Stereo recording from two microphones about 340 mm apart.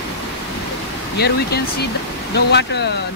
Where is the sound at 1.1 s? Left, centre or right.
Left.